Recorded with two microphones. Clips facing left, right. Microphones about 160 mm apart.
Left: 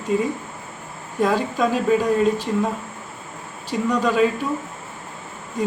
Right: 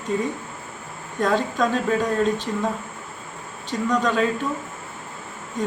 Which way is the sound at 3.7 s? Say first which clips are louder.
Left 1 dB; 5° left (ahead or behind).